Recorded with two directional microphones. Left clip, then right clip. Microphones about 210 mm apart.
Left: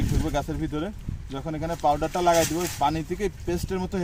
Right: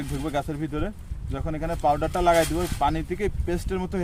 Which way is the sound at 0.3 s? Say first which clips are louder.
Right 2 dB; 5° left (ahead or behind).